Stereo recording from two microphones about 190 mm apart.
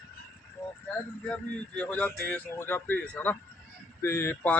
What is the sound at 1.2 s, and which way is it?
A man's voice, 5° left (ahead or behind).